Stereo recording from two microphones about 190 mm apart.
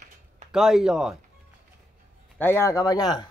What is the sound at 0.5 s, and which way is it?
Speech, centre (ahead or behind).